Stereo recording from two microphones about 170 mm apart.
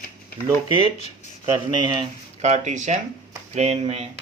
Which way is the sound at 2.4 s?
45° right (ahead or behind).